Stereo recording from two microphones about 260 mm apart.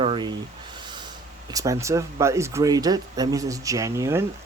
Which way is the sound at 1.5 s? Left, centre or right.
Centre.